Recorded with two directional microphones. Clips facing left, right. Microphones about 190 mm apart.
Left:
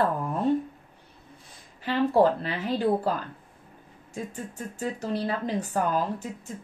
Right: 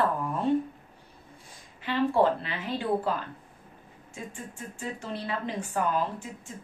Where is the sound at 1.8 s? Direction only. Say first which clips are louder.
Left 3 dB; 40° left (ahead or behind).